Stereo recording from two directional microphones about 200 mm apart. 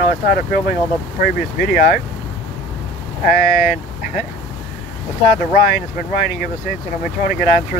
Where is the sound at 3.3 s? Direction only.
45° left (ahead or behind).